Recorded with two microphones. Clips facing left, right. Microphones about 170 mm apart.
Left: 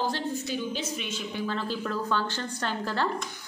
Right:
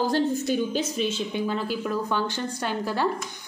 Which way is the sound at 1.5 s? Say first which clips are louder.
Right 3 dB; 10° right (ahead or behind).